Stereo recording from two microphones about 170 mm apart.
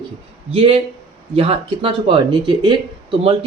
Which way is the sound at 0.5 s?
35° right (ahead or behind).